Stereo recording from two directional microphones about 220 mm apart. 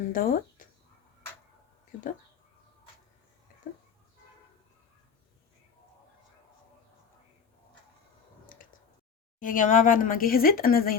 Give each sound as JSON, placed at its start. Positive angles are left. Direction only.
{"t": 0.1, "sound": "speech", "side_deg": 40}
{"t": 9.4, "sound": "speech", "side_deg": 40}